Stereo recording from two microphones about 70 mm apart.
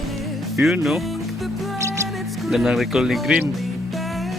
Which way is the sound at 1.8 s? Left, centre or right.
Right.